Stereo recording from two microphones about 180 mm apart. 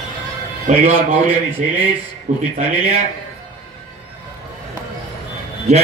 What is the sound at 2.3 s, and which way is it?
Speech, 45° right (ahead or behind).